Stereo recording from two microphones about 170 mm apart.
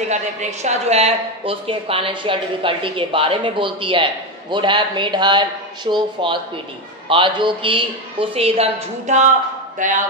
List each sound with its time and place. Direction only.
0.1 s a woman's voice: 45° right (ahead or behind)